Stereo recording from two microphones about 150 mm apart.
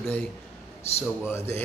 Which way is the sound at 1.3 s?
15° left (ahead or behind).